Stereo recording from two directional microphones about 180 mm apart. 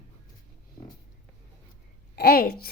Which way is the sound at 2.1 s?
60° left (ahead or behind).